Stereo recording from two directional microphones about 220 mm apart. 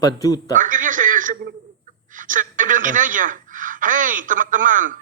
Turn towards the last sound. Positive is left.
turn(degrees=-35)  # may be behind; listen again after turning